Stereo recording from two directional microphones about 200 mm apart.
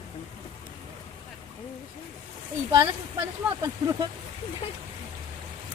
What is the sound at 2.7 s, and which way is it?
Speech, 15° right (ahead or behind).